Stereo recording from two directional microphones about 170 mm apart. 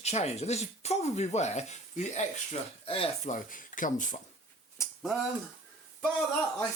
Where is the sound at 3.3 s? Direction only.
50° left (ahead or behind).